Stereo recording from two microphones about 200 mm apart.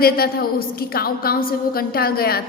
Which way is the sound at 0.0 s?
50° left (ahead or behind).